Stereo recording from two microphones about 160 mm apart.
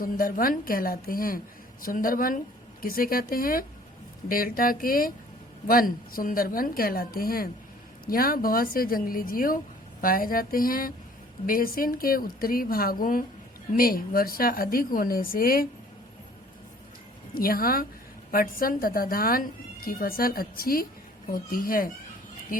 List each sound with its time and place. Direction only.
0.0 s speech: 60° left (ahead or behind)
17.3 s speech: 65° left (ahead or behind)